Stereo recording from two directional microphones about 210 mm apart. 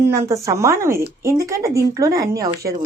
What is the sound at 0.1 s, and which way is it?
Speech, 15° right (ahead or behind).